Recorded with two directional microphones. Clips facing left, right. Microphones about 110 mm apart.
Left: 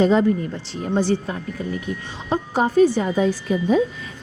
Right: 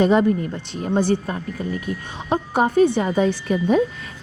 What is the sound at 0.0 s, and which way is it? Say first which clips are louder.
Speech: even; 15° right (ahead or behind).